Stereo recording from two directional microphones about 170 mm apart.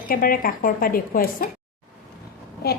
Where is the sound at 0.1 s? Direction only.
60° left (ahead or behind).